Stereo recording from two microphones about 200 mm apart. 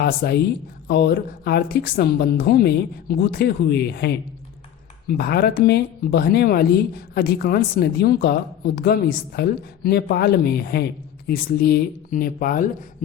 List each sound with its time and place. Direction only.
0.2 s a woman's voice: 50° left (ahead or behind)